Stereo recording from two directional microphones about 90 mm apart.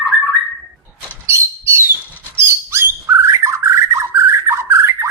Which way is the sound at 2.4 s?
30° right (ahead or behind).